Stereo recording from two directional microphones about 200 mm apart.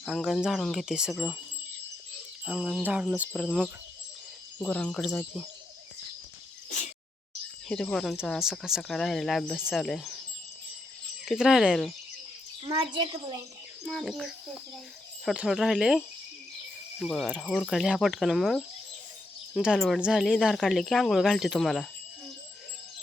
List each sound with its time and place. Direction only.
0.0 s speech: centre (ahead or behind)
2.4 s speech: 5° right (ahead or behind)
7.7 s speech: 5° left (ahead or behind)
11.3 s speech: centre (ahead or behind)
12.6 s a child's voice: 25° right (ahead or behind)
13.8 s speech: centre (ahead or behind)